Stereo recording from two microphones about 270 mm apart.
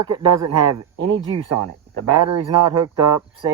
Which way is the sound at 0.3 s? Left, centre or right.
Right.